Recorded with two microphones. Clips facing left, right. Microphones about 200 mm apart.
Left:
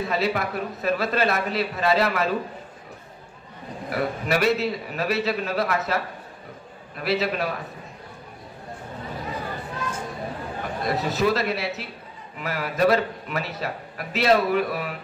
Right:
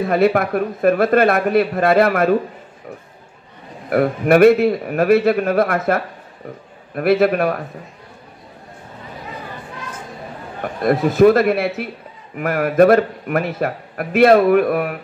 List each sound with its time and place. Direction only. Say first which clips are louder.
0.0 s a man's voice: right 9 dB; 55° right (ahead or behind)
3.9 s a man's voice: right 11 dB; 55° right (ahead or behind)
10.6 s a man's voice: right 10 dB; 55° right (ahead or behind)